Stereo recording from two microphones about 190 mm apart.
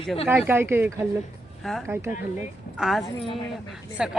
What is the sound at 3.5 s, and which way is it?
Speech, centre (ahead or behind).